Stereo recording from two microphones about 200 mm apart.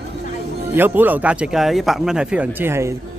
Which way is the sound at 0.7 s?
10° right (ahead or behind).